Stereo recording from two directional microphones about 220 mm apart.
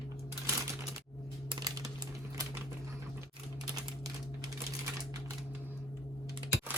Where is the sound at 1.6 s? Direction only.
15° right (ahead or behind).